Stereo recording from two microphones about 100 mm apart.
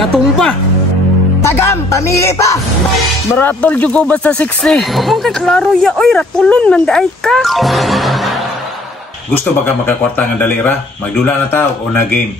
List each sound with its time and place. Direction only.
0.0 s speech: 5° left (ahead or behind)
1.4 s speech: 30° left (ahead or behind)
3.3 s speech: 20° left (ahead or behind); by 8.3 s centre (ahead or behind)
9.8 s speech: 15° left (ahead or behind)